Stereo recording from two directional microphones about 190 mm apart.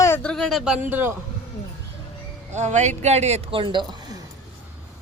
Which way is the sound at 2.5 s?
40° right (ahead or behind).